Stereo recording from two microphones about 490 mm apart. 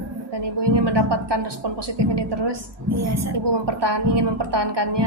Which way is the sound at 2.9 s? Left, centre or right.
Right.